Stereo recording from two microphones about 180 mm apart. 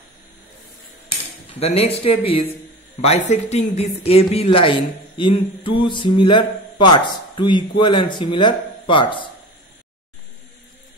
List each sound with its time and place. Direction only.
1.6 s speech: 35° left (ahead or behind)